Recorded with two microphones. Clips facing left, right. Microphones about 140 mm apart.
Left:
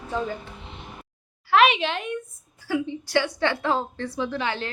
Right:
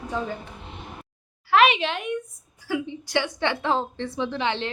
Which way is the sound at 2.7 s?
15° right (ahead or behind).